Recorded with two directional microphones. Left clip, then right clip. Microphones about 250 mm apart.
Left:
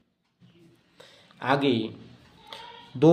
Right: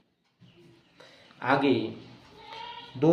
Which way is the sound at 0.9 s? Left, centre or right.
Left.